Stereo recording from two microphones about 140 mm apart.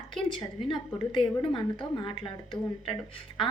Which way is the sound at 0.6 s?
35° left (ahead or behind).